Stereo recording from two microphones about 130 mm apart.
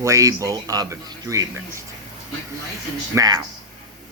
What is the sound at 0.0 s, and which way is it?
Speech, 25° right (ahead or behind).